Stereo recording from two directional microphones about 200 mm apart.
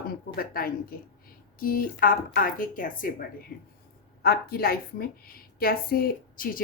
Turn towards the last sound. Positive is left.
turn(degrees=45)  # may be behind; listen again after turning